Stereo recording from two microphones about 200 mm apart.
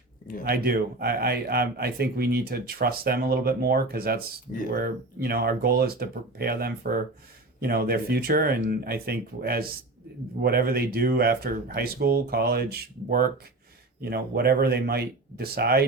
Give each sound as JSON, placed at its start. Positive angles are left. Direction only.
{"t": 0.4, "sound": "speech", "side_deg": -50}